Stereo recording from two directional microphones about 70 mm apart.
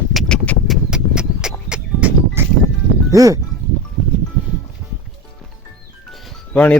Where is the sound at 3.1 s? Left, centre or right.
Right.